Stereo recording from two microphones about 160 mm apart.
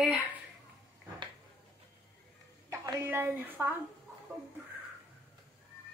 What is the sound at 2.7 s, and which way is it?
A woman's voice, 20° right (ahead or behind).